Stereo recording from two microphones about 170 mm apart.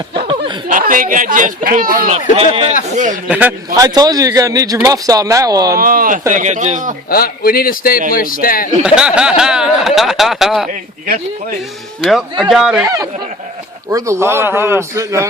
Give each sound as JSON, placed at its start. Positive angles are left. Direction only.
{"t": 0.1, "sound": "snicker", "side_deg": -30}
{"t": 0.7, "sound": "speech", "side_deg": -55}
{"t": 2.3, "sound": "speech", "side_deg": -35}
{"t": 2.9, "sound": "speech", "side_deg": -45}
{"t": 3.2, "sound": "a man's voice", "side_deg": -10}
{"t": 3.8, "sound": "a man's voice", "side_deg": -20}
{"t": 5.7, "sound": "speech", "side_deg": -55}
{"t": 6.3, "sound": "speech", "side_deg": -45}
{"t": 7.1, "sound": "a man's voice", "side_deg": 60}
{"t": 8.8, "sound": "speech", "side_deg": -5}
{"t": 12.0, "sound": "speech", "side_deg": 0}
{"t": 12.8, "sound": "a man's voice", "side_deg": -20}